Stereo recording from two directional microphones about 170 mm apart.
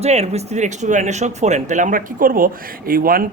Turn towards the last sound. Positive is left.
turn(degrees=-60)  # may be behind; listen again after turning